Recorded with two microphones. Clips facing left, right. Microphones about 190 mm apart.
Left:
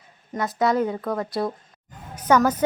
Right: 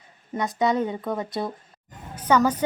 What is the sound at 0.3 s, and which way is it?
Speech, 20° right (ahead or behind).